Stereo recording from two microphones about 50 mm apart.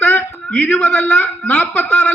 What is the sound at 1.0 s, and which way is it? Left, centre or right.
A man's voice, left.